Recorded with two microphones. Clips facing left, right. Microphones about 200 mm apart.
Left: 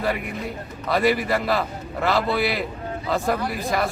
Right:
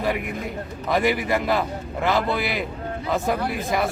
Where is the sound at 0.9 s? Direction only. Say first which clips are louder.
Left 1 dB; 20° right (ahead or behind).